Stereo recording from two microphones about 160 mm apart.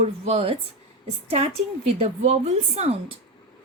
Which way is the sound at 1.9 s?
40° right (ahead or behind).